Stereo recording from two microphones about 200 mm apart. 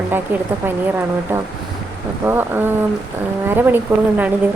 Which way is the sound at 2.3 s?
10° right (ahead or behind).